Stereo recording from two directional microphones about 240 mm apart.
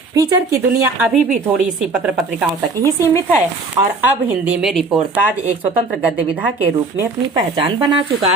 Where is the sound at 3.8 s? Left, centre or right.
Right.